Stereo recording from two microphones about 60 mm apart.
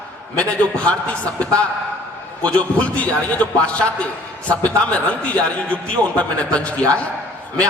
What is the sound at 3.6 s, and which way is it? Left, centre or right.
A man's voice, left.